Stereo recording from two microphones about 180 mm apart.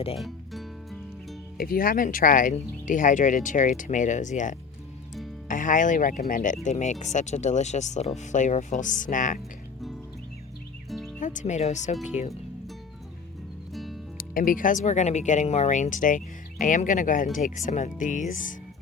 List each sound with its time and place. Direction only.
0.2 s music: centre (ahead or behind)
1.5 s speech: 55° left (ahead or behind)
10.8 s music: centre (ahead or behind)
11.2 s speech: 45° left (ahead or behind)
13.7 s music: centre (ahead or behind)
14.2 s speech: 50° left (ahead or behind)